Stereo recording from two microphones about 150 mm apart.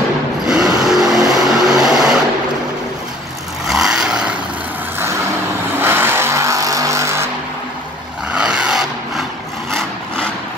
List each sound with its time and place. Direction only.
0.5 s vehicle: 5° right (ahead or behind)
3.6 s vehicle: 5° right (ahead or behind)
5.8 s vehicle: 15° right (ahead or behind)
8.3 s vehicle: 5° right (ahead or behind)